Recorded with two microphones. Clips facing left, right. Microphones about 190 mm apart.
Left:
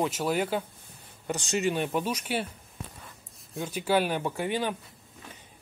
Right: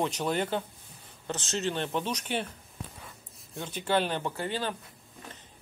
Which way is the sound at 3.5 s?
10° left (ahead or behind).